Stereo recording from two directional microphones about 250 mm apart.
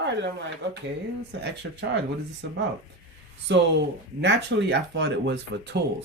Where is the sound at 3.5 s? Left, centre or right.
Right.